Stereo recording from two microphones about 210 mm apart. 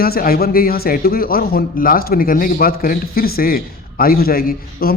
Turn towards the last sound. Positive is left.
turn(degrees=45)  # may be behind; listen again after turning